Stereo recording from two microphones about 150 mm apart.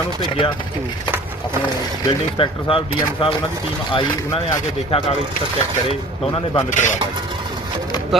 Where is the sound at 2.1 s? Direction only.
35° left (ahead or behind).